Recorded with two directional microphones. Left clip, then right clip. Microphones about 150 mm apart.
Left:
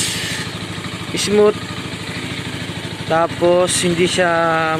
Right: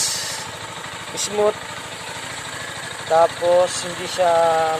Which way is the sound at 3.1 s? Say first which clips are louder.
Left 1 dB; 15° left (ahead or behind).